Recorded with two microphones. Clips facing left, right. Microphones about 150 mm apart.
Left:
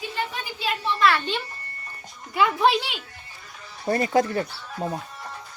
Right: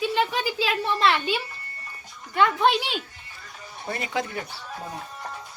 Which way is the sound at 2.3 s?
Centre (ahead or behind).